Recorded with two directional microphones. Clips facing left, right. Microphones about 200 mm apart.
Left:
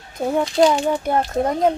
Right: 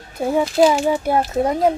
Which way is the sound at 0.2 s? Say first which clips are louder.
Right 1 dB; 5° right (ahead or behind).